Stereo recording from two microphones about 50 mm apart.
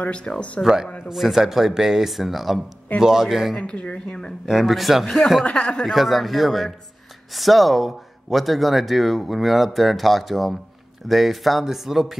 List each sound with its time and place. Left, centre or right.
0.0 s speech: left
1.1 s a man's voice: centre
3.5 s speech: centre
4.5 s speech: centre
5.4 s speech: left
5.9 s speech: centre